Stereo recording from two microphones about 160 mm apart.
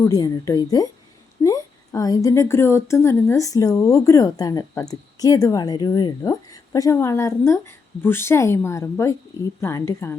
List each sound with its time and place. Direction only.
0.0 s a woman's voice: 20° left (ahead or behind)